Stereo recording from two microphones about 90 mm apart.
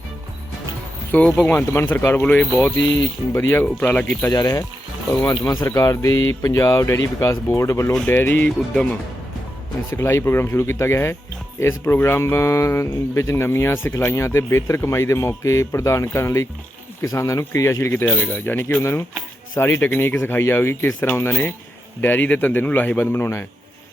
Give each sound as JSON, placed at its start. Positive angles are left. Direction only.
{"t": 1.1, "sound": "speech", "side_deg": 20}
{"t": 3.8, "sound": "speech", "side_deg": 15}
{"t": 4.4, "sound": "speech", "side_deg": 40}
{"t": 5.7, "sound": "speech", "side_deg": 35}
{"t": 8.7, "sound": "speech", "side_deg": 10}
{"t": 9.9, "sound": "speech", "side_deg": 30}